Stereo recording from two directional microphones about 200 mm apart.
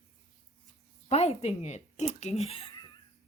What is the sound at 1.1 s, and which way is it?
Speech, 35° left (ahead or behind).